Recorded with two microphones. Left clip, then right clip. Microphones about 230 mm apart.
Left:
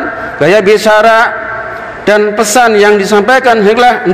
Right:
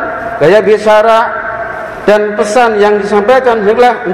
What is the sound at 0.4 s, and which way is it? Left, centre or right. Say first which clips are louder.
A man's voice: even; left.